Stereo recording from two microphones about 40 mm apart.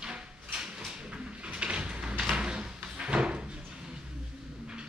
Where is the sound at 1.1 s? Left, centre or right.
Right.